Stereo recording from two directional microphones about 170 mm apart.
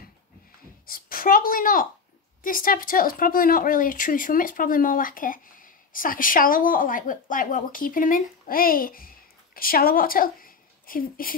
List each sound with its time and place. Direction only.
0.8 s a child's voice: 60° left (ahead or behind)